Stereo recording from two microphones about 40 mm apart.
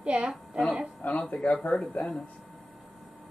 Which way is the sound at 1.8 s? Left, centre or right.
Left.